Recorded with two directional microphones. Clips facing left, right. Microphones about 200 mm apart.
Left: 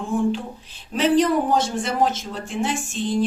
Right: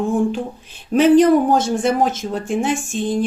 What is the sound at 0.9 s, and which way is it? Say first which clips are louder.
A woman's voice: right 7 dB; 50° right (ahead or behind).